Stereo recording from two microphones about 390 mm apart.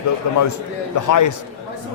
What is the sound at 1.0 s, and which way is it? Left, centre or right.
Speech, left.